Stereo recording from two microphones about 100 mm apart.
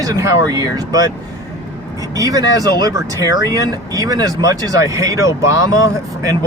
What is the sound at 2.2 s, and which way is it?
Speech, 35° right (ahead or behind).